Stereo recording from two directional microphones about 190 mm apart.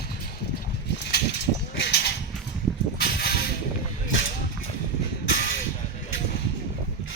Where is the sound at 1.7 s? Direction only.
65° left (ahead or behind).